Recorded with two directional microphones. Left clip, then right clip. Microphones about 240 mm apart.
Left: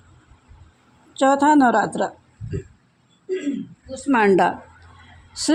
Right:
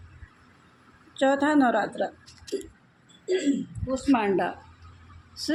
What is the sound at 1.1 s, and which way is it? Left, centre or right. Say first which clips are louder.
Speech: left 7 dB; left.